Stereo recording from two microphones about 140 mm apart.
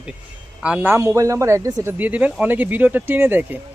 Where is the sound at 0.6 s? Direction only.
10° right (ahead or behind).